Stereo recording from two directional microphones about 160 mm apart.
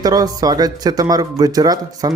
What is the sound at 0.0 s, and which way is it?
Speech, 25° right (ahead or behind).